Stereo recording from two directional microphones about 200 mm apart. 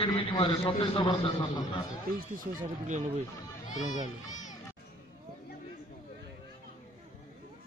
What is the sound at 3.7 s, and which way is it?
Speech, 40° left (ahead or behind).